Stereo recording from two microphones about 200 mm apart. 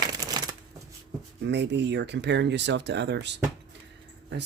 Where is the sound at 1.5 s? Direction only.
60° right (ahead or behind).